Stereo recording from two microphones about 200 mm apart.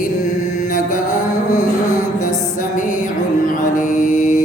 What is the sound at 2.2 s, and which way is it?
Music, 40° left (ahead or behind).